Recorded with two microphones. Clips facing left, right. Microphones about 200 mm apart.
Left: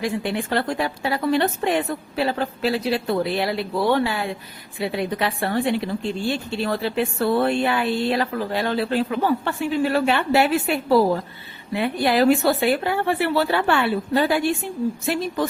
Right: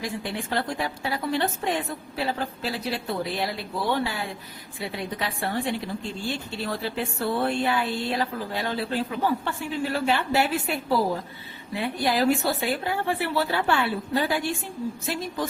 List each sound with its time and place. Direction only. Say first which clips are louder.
0.0 s a woman's voice: left 7 dB; 65° left (ahead or behind)